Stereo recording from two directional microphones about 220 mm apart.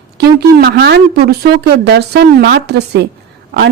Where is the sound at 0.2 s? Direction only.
45° right (ahead or behind).